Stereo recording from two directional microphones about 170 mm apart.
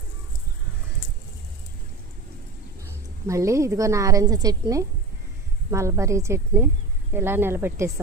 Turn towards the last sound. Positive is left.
turn(degrees=-15)  # may be behind; listen again after turning